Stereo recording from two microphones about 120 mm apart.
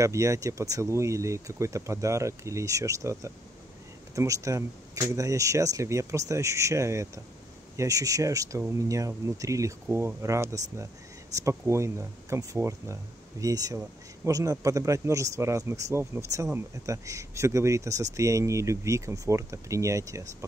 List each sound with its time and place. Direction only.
0.0 s speech: 25° right (ahead or behind)